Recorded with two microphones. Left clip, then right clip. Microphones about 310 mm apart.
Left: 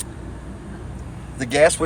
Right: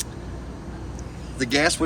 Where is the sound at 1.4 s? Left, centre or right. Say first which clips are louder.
Left 5 dB; left.